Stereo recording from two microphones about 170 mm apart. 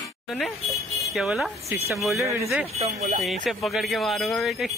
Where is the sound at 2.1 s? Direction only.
15° right (ahead or behind).